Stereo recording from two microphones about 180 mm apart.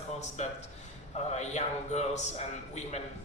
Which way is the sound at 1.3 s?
40° left (ahead or behind).